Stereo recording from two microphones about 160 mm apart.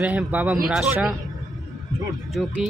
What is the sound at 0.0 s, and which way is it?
Speech, 10° right (ahead or behind).